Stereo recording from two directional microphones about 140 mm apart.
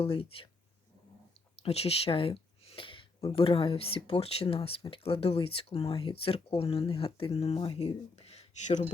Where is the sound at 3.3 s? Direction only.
40° left (ahead or behind).